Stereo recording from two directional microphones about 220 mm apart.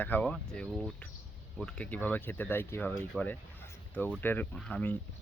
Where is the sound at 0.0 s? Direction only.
5° left (ahead or behind).